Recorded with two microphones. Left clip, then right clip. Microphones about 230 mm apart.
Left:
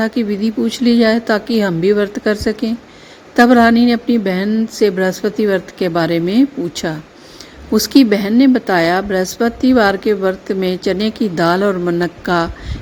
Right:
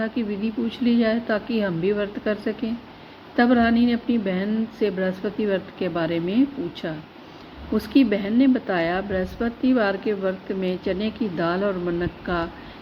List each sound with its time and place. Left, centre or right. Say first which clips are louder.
0.0 s a woman's voice: left 9 dB; left